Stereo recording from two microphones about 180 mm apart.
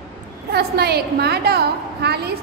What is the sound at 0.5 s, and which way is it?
A woman's voice, 65° right (ahead or behind).